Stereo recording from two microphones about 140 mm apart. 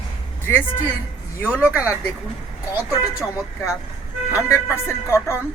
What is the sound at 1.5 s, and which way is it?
Speech, 10° right (ahead or behind).